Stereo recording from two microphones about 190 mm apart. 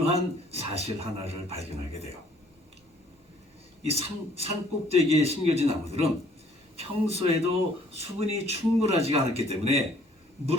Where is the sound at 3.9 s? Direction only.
30° right (ahead or behind).